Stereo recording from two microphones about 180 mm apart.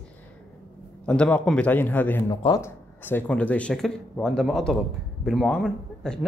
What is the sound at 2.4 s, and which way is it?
Speech, 20° left (ahead or behind).